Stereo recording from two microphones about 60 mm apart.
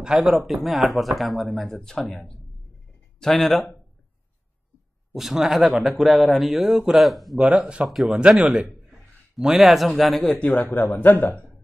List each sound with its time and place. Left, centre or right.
0.0 s speech: centre
5.1 s speech: centre
7.4 s speech: centre
7.9 s speech: centre
10.4 s a man's voice: left